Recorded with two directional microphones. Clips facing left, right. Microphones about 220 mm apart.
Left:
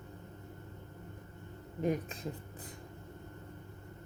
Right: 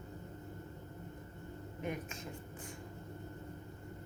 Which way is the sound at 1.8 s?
35° left (ahead or behind).